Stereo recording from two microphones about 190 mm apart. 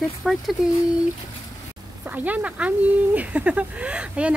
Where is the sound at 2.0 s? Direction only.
10° right (ahead or behind).